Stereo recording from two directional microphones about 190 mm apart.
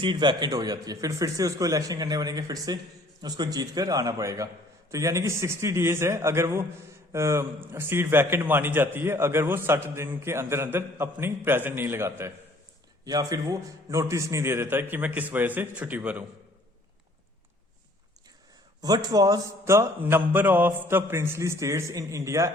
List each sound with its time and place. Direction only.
0.0 s a man's voice: 25° right (ahead or behind); by 16.2 s 10° right (ahead or behind)
18.8 s a man's voice: 20° right (ahead or behind)